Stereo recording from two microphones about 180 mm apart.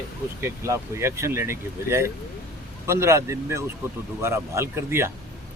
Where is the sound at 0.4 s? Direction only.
15° right (ahead or behind).